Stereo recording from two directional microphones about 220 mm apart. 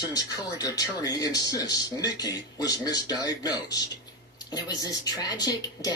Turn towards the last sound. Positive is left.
turn(degrees=15)  # may be behind; listen again after turning